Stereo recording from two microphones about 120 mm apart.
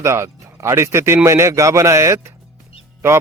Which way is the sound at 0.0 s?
25° right (ahead or behind).